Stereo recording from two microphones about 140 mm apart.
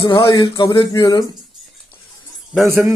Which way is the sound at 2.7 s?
10° right (ahead or behind).